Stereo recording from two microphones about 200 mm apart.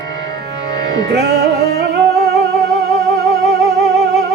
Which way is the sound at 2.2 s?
Centre (ahead or behind).